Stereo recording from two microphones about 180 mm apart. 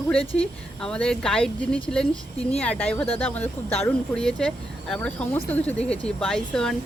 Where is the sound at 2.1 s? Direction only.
35° left (ahead or behind).